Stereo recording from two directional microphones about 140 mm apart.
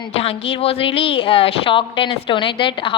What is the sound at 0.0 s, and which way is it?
A woman's voice, 45° left (ahead or behind).